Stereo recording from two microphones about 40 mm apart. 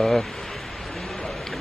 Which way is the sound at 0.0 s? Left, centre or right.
Centre.